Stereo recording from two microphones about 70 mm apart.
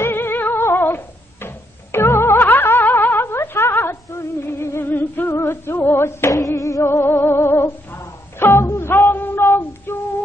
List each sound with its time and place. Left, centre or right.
0.0 s music: left
2.4 s a sound: left
6.3 s music: left
7.2 s humming: left